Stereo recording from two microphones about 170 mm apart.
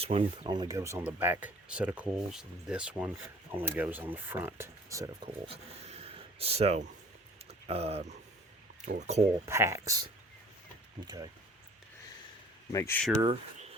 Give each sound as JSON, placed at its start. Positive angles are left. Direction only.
{"t": 0.0, "sound": "speech", "side_deg": -35}
{"t": 5.5, "sound": "a sound", "side_deg": -40}
{"t": 7.4, "sound": "speech", "side_deg": -35}
{"t": 9.5, "sound": "speech", "side_deg": -15}
{"t": 12.7, "sound": "speech", "side_deg": 15}
{"t": 13.2, "sound": "speech", "side_deg": -35}